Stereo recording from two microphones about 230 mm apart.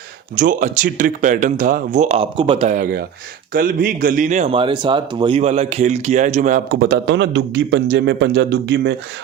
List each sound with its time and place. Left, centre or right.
0.3 s speech: right